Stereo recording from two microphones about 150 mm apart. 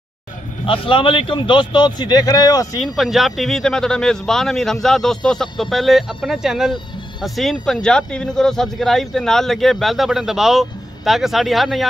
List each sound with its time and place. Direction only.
0.7 s a man's voice: 35° left (ahead or behind)
2.8 s speech: centre (ahead or behind)